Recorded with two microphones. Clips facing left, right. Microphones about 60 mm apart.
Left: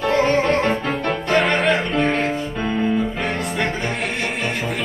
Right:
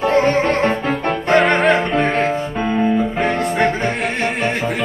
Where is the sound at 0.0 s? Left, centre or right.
Right.